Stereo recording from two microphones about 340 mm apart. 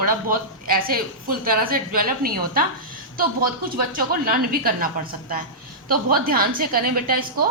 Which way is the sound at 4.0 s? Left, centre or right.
Right.